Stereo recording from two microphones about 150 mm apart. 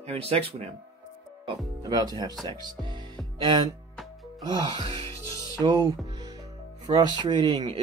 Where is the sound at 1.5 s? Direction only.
25° right (ahead or behind).